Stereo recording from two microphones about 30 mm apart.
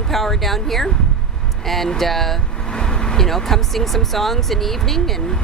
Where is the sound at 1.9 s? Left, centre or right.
Centre.